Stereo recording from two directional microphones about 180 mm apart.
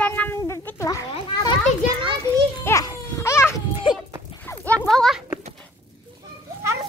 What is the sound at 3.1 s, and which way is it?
Baby cry, 15° left (ahead or behind).